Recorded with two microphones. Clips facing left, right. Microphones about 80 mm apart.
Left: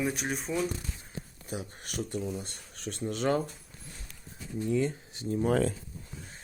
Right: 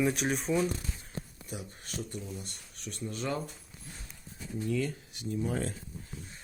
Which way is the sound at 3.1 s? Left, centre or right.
Left.